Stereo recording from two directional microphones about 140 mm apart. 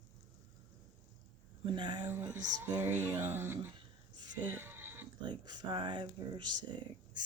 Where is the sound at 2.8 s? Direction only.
15° right (ahead or behind).